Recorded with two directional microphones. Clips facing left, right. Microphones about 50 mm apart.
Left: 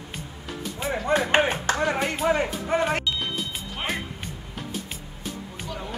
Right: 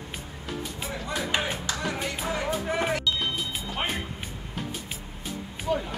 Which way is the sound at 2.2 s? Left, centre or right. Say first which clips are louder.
Left 4 dB; left.